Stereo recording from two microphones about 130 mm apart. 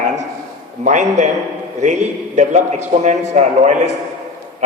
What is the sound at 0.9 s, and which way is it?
A man's voice, 65° right (ahead or behind).